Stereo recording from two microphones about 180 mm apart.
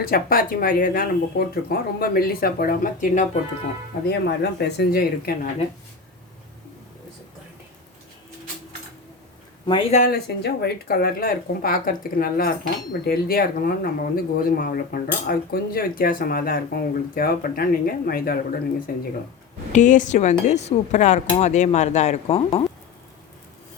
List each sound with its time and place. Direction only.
0.0 s speech: 55° left (ahead or behind)
4.0 s speech: 70° left (ahead or behind)
9.6 s speech: 30° left (ahead or behind)
10.0 s speech: 60° left (ahead or behind)
19.7 s speech: 45° left (ahead or behind)